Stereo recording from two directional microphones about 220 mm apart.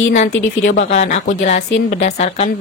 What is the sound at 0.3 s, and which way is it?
Speech, 55° left (ahead or behind).